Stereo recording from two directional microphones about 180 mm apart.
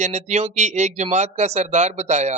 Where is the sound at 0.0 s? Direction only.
40° right (ahead or behind).